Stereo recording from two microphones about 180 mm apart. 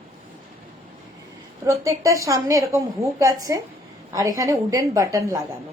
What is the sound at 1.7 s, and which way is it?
A woman's voice, 15° right (ahead or behind).